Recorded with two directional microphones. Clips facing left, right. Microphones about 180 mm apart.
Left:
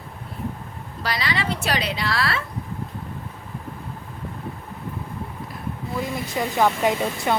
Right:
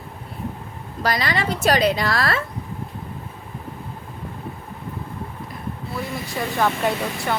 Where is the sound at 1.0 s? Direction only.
45° right (ahead or behind).